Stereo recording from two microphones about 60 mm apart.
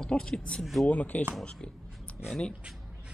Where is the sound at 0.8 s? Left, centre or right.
Left.